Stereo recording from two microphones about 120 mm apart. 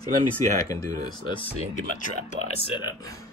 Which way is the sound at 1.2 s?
45° left (ahead or behind).